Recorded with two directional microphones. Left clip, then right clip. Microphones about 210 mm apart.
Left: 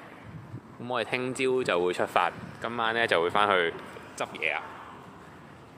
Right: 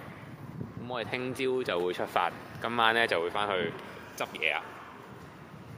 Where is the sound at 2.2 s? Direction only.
Centre (ahead or behind).